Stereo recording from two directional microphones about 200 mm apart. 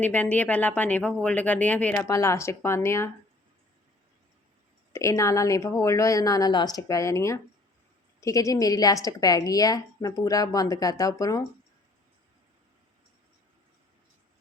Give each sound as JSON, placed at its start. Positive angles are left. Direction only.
{"t": 0.0, "sound": "speech", "side_deg": 5}
{"t": 4.9, "sound": "speech", "side_deg": 15}